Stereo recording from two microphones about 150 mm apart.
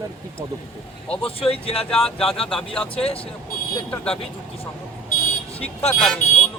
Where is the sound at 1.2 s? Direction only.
40° left (ahead or behind).